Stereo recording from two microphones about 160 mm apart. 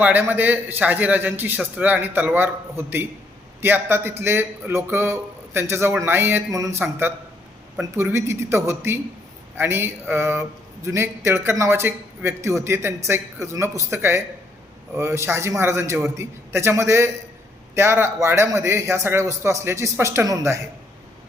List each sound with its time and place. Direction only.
0.0 s a man's voice: 10° right (ahead or behind)